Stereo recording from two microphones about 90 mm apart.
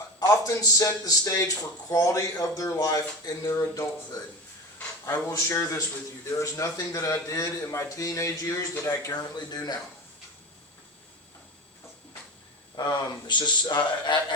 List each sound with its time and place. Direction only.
0.3 s speech: 35° left (ahead or behind)
5.0 s speech: 30° left (ahead or behind); by 9.7 s 50° left (ahead or behind)
12.7 s speech: 55° left (ahead or behind)